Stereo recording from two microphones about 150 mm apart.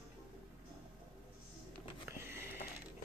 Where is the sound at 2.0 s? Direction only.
15° right (ahead or behind).